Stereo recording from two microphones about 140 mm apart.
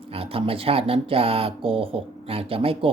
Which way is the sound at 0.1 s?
40° right (ahead or behind).